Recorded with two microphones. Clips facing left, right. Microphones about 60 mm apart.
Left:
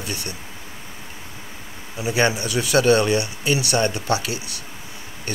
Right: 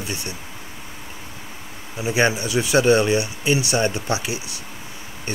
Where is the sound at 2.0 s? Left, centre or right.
Centre.